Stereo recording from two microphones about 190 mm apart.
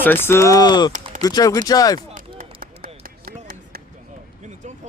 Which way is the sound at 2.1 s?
50° right (ahead or behind).